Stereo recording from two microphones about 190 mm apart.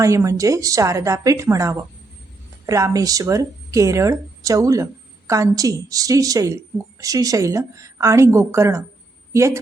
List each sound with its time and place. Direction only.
0.0 s a woman's voice: 15° right (ahead or behind)